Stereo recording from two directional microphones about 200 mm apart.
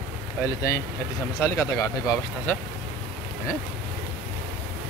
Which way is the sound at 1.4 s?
15° left (ahead or behind).